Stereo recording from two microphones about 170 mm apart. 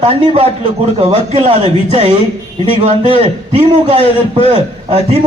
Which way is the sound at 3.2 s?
30° right (ahead or behind).